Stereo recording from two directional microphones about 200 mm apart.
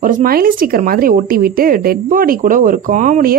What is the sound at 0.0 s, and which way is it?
Speech, 45° right (ahead or behind).